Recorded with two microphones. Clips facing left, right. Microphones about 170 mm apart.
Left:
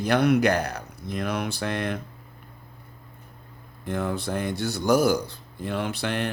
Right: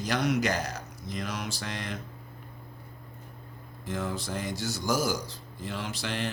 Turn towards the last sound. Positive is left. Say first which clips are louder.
# left 6 dB
turn(degrees=60)  # may be behind; listen again after turning